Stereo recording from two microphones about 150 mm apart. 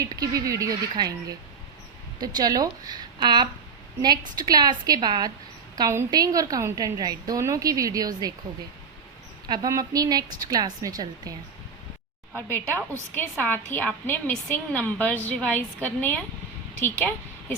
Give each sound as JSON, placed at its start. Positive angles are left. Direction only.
{"t": 0.0, "sound": "a woman's voice", "side_deg": -25}
{"t": 9.5, "sound": "a woman's voice", "side_deg": -25}
{"t": 12.4, "sound": "a woman's voice", "side_deg": 10}